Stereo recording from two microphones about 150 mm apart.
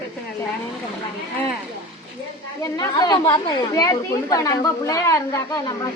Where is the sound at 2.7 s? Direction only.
25° left (ahead or behind).